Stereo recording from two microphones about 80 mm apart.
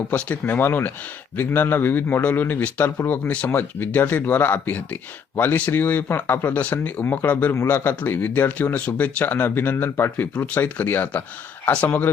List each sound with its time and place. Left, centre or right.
0.1 s a man's voice: left
7.5 s speech: left
7.9 s a man's voice: left